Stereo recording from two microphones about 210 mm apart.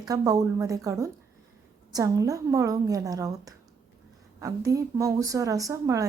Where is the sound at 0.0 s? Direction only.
15° right (ahead or behind).